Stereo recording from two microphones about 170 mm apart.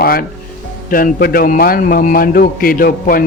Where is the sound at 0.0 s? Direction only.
60° left (ahead or behind).